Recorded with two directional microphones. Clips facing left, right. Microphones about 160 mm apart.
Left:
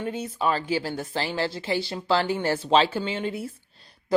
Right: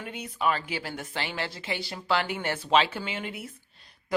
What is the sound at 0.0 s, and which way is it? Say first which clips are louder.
A woman's voice: left 3 dB; 30° left (ahead or behind).